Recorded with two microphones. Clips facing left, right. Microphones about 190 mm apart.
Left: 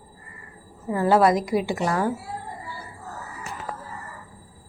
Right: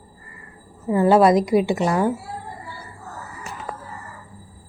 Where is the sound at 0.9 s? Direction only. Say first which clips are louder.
Right 4 dB; 20° right (ahead or behind).